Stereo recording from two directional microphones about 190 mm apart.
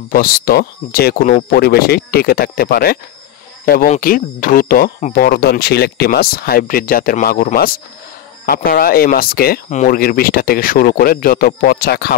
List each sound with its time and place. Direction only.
0.1 s speech: 50° left (ahead or behind)